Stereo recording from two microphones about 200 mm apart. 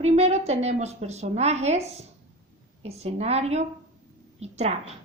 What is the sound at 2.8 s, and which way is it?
A woman's voice, 30° right (ahead or behind).